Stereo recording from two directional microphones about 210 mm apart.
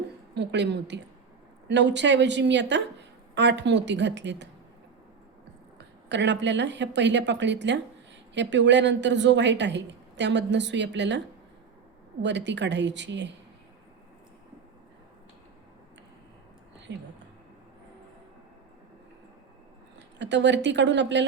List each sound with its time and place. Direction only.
0.3 s a woman's voice: 55° right (ahead or behind)
6.1 s a woman's voice: 55° right (ahead or behind)
12.2 s a woman's voice: 55° right (ahead or behind)
16.9 s a woman's voice: 55° right (ahead or behind)
20.1 s a woman's voice: 55° right (ahead or behind)